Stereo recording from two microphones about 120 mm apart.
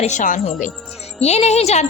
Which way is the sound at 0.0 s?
85° left.